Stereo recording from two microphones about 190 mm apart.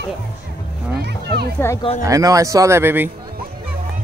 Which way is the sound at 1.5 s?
15° left (ahead or behind).